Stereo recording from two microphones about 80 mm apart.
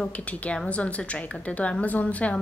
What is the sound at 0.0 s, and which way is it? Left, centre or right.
A woman's voice, centre.